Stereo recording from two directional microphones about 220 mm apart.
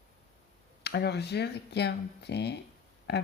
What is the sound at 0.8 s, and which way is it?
Speech, 50° left (ahead or behind).